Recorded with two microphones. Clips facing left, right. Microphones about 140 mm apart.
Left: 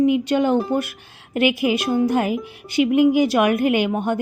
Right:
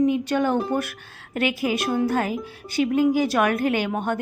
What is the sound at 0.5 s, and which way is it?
A woman's voice, centre (ahead or behind).